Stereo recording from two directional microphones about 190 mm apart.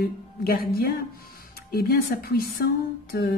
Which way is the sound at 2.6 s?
55° left (ahead or behind).